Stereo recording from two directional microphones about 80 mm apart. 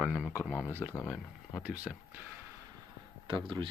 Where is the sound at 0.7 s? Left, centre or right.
Right.